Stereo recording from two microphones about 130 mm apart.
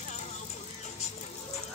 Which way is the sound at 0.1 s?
65° left (ahead or behind).